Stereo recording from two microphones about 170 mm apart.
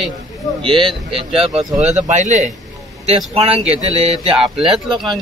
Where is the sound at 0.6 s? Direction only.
30° right (ahead or behind).